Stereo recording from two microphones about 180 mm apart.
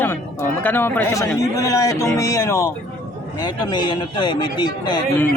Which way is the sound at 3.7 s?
25° left (ahead or behind).